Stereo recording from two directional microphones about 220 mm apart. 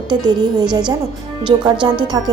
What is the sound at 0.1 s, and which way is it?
A woman's voice, 20° right (ahead or behind).